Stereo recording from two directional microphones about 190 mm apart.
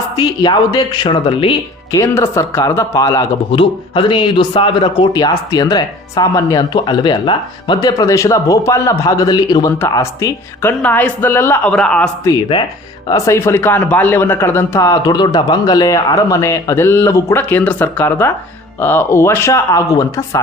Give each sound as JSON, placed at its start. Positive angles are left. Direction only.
{"t": 0.2, "sound": "speech", "side_deg": 25}
{"t": 2.0, "sound": "speech", "side_deg": 15}
{"t": 12.3, "sound": "speech", "side_deg": 25}